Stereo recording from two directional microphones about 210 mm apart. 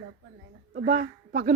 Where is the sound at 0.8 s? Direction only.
40° right (ahead or behind).